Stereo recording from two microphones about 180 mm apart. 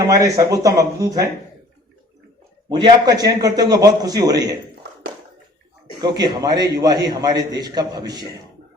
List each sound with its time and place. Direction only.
0.1 s a man's voice: 20° right (ahead or behind)
2.6 s a man's voice: 25° right (ahead or behind)
6.0 s a man's voice: 20° right (ahead or behind)